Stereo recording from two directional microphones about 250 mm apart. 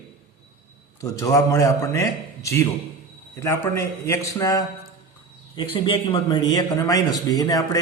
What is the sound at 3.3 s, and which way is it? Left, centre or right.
A man's voice, centre.